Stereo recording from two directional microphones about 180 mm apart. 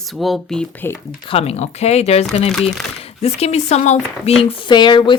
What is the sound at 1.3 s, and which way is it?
Speech, 35° left (ahead or behind).